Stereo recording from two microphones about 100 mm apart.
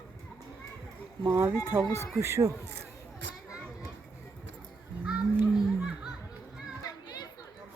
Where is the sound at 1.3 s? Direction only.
25° right (ahead or behind).